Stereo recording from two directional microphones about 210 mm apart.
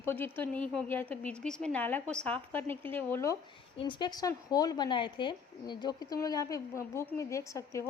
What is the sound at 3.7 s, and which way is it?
A woman's voice, 25° left (ahead or behind).